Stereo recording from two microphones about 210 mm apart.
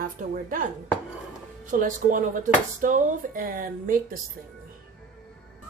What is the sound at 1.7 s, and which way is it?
Speech, 40° right (ahead or behind).